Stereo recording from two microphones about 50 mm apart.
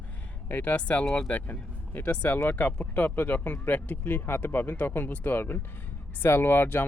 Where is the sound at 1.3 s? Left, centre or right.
Left.